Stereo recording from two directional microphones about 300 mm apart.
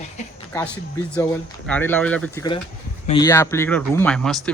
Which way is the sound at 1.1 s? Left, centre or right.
Centre.